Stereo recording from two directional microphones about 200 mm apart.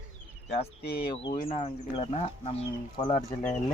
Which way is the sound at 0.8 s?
50° left (ahead or behind).